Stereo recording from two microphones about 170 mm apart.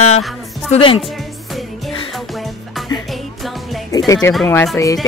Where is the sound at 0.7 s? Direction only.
35° left (ahead or behind).